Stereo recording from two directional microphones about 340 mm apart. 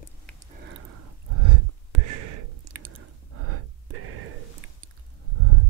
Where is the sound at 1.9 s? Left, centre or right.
Right.